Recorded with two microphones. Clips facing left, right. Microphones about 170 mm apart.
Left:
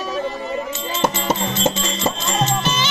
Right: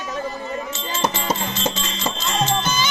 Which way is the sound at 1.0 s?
25° left (ahead or behind).